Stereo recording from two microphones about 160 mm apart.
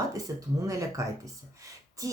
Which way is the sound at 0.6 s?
20° right (ahead or behind).